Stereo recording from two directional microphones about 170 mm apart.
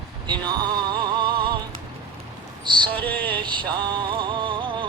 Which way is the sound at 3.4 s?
25° right (ahead or behind).